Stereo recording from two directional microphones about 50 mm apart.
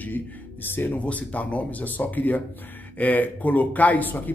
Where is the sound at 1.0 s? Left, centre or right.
Left.